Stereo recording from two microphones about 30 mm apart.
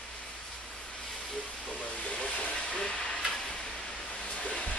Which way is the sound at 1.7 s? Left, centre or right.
Left.